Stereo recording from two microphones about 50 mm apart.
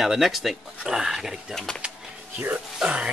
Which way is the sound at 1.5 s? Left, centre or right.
Centre.